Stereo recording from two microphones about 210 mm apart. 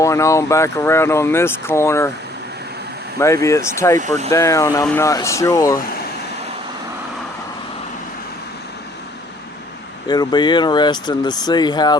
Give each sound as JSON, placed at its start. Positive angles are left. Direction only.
{"t": 0.0, "sound": "speech", "side_deg": 15}
{"t": 3.2, "sound": "speech", "side_deg": 15}
{"t": 10.1, "sound": "speech", "side_deg": 20}